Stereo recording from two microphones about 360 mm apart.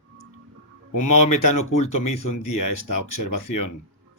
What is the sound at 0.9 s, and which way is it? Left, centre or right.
Speech, left.